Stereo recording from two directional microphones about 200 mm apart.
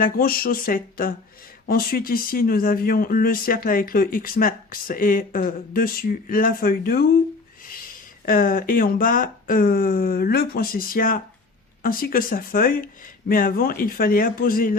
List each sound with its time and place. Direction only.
0.0 s speech: 45° left (ahead or behind)
8.2 s speech: 45° left (ahead or behind)